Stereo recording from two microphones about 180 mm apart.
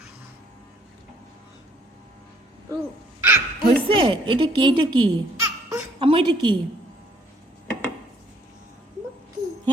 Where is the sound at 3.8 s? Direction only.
30° right (ahead or behind).